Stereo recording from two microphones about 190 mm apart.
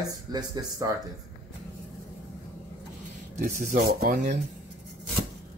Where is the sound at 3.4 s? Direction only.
50° right (ahead or behind).